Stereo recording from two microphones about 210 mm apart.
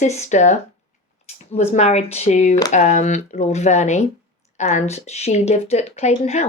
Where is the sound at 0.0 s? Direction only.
35° left (ahead or behind).